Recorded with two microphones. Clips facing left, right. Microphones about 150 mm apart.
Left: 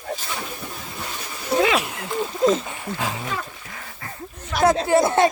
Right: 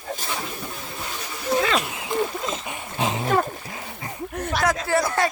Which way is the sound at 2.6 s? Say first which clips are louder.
Right 1 dB; 20° right (ahead or behind).